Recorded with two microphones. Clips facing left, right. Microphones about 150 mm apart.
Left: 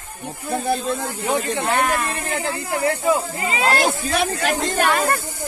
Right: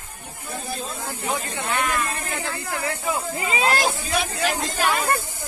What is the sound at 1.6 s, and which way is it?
Speech, 50° left (ahead or behind).